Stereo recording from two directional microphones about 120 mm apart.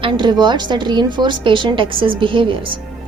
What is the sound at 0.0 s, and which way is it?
A woman's voice, 40° right (ahead or behind).